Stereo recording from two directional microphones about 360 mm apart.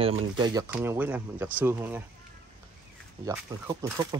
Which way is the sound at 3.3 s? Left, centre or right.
Centre.